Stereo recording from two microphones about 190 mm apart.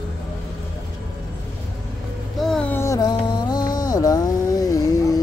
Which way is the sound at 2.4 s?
5° left (ahead or behind).